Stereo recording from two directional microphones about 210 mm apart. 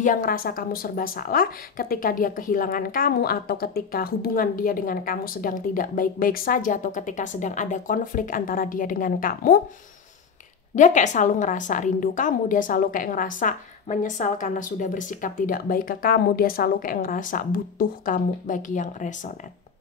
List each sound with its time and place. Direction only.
0.0 s speech: 40° left (ahead or behind)
10.8 s speech: 35° left (ahead or behind)